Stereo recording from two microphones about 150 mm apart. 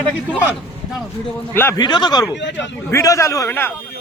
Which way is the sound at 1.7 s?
30° left (ahead or behind).